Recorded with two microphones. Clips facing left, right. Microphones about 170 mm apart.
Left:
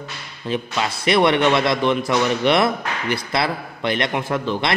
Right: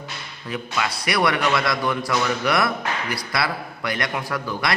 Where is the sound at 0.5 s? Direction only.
25° left (ahead or behind).